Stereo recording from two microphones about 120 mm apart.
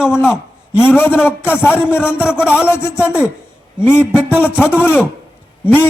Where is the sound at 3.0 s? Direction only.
10° right (ahead or behind).